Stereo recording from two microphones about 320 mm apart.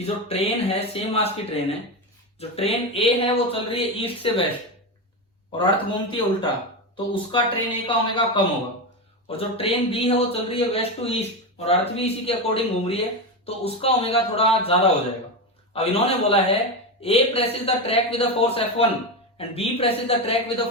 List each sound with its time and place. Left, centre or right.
0.0 s a man's voice: centre
5.5 s speech: centre
9.6 s a man's voice: centre